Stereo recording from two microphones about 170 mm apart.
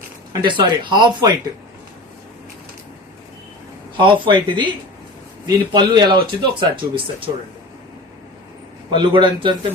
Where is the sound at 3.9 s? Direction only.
30° right (ahead or behind).